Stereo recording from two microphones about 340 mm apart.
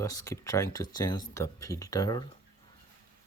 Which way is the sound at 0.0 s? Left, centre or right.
Centre.